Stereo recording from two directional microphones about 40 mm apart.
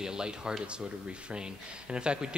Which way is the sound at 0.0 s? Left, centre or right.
Centre.